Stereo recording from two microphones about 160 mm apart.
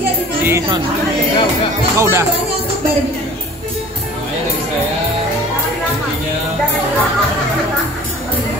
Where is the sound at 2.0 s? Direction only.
15° right (ahead or behind).